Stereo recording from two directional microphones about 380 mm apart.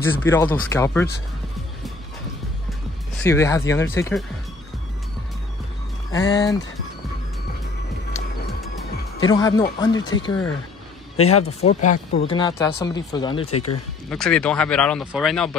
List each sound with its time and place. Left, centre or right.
0.0 s speech: centre
3.3 s speech: centre
6.1 s speech: centre
9.3 s speech: centre
11.6 s speech: centre
14.0 s speech: centre